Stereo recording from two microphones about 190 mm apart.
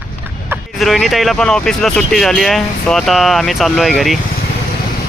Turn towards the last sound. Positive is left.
turn(degrees=0)  # may be behind; listen again after turning